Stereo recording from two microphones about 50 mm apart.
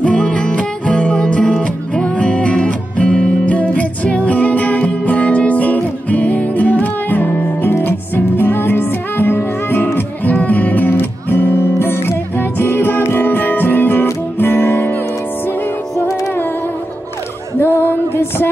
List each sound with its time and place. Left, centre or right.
0.0 s music: left
8.4 s music: left
10.3 s music: left
17.6 s music: left